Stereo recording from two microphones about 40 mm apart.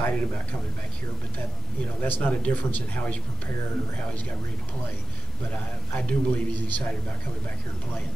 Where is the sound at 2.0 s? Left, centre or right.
Left.